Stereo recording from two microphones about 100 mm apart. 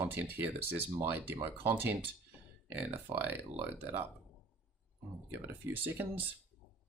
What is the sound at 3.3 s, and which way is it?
Speech, 20° right (ahead or behind).